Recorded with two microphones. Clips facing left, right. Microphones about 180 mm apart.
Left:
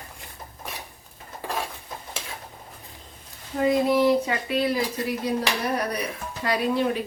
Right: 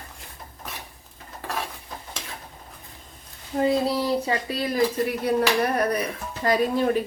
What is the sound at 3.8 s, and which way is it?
Speech, 35° right (ahead or behind).